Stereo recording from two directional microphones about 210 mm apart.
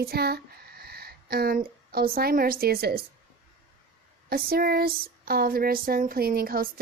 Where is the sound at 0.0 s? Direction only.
45° right (ahead or behind).